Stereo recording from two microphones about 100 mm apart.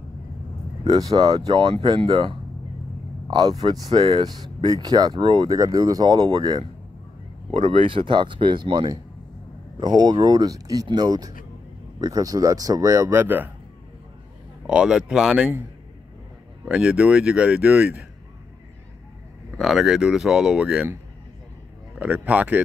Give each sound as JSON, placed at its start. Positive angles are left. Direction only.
{"t": 0.8, "sound": "speech", "side_deg": -45}
{"t": 1.3, "sound": "speech", "side_deg": -55}
{"t": 3.3, "sound": "a man's voice", "side_deg": -45}
{"t": 14.7, "sound": "speech", "side_deg": -10}
{"t": 16.6, "sound": "speech", "side_deg": -10}
{"t": 19.6, "sound": "speech", "side_deg": -5}
{"t": 21.9, "sound": "speech", "side_deg": -15}